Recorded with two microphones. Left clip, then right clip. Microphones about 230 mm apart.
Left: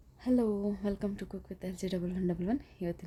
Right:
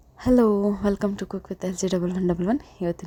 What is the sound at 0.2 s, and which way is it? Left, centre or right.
A woman's voice, right.